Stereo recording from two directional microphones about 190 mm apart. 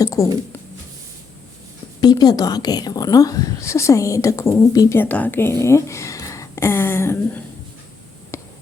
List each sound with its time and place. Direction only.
0.0 s a woman's voice: 20° left (ahead or behind)
2.0 s a woman's voice: 20° left (ahead or behind)
8.3 s a sound: 15° left (ahead or behind)